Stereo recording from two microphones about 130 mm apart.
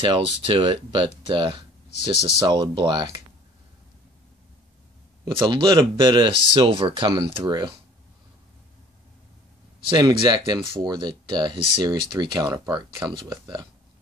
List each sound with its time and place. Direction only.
0.0 s speech: 40° right (ahead or behind)
5.4 s speech: 35° right (ahead or behind)
9.8 s speech: 35° right (ahead or behind)